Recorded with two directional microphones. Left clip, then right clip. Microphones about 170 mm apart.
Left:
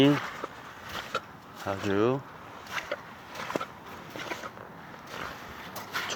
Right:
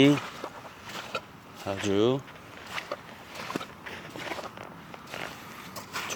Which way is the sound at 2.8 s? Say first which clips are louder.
Left 1 dB; 25° left (ahead or behind).